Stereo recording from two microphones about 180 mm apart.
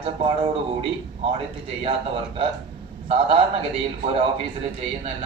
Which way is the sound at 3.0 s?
30° right (ahead or behind).